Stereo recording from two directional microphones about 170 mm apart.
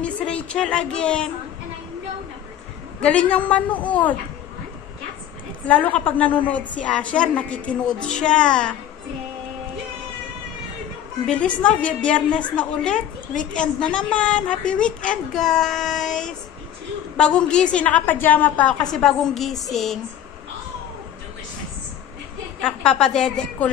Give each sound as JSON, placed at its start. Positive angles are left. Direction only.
{"t": 0.0, "sound": "speech", "side_deg": 5}
{"t": 3.0, "sound": "a woman's voice", "side_deg": 5}
{"t": 5.7, "sound": "a woman's voice", "side_deg": 10}
{"t": 11.2, "sound": "a woman's voice", "side_deg": 5}
{"t": 13.3, "sound": "a woman's voice", "side_deg": 50}
{"t": 13.6, "sound": "a woman's voice", "side_deg": 5}
{"t": 22.6, "sound": "a woman's voice", "side_deg": 5}